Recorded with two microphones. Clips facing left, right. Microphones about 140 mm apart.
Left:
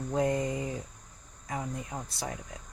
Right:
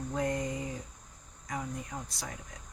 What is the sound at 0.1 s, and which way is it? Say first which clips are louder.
Speech: left 5 dB; 25° left (ahead or behind).